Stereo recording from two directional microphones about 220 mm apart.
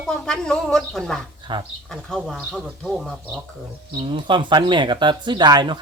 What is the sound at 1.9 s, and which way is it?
Speech, centre (ahead or behind).